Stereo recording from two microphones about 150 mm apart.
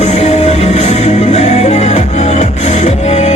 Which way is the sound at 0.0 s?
45° left (ahead or behind).